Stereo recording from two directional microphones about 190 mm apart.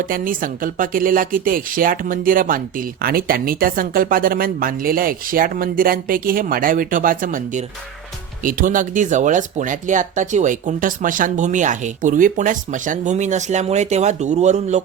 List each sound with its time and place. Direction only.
0.0 s speech: 45° right (ahead or behind)